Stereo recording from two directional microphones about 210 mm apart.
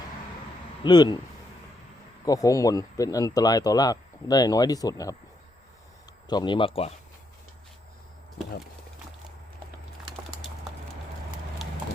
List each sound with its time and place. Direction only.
0.9 s speech: 20° left (ahead or behind)
2.2 s speech: 15° left (ahead or behind)
6.2 s speech: 20° left (ahead or behind)